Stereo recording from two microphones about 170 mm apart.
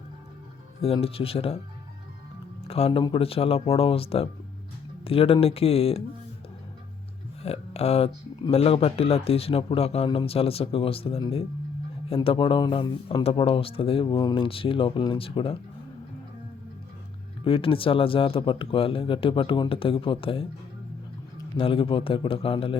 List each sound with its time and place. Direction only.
0.9 s speech: 35° left (ahead or behind)
2.6 s speech: 35° left (ahead or behind)
7.4 s speech: 35° left (ahead or behind)
17.4 s speech: 30° left (ahead or behind)
21.6 s speech: 30° left (ahead or behind)